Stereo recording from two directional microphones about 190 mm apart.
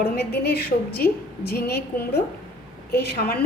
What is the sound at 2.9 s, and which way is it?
Speech, 55° left (ahead or behind).